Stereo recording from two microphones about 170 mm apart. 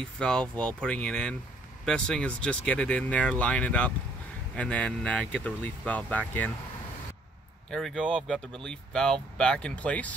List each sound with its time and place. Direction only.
0.0 s speech: 5° left (ahead or behind)
7.7 s speech: 5° left (ahead or behind)